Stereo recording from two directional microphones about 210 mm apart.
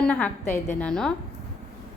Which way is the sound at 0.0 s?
5° left (ahead or behind).